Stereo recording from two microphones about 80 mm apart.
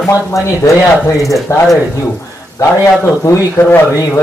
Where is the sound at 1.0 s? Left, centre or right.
Left.